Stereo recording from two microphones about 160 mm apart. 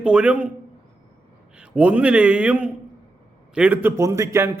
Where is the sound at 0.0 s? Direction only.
5° right (ahead or behind).